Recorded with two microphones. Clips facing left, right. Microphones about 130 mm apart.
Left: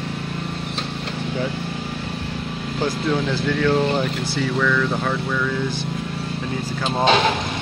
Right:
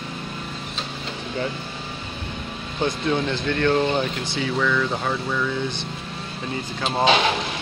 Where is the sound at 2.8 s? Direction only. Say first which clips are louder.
Left 1 dB; 5° left (ahead or behind).